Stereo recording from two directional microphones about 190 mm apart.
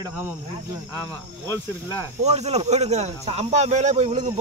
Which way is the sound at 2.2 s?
35° right (ahead or behind).